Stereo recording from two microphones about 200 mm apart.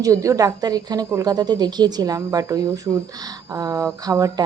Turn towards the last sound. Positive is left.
turn(degrees=-15)  # may be behind; listen again after turning